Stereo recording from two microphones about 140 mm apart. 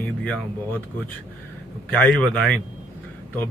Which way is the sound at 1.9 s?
10° left (ahead or behind).